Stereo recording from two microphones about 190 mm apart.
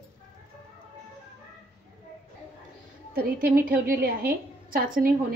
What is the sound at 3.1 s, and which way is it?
A woman's voice, 50° right (ahead or behind).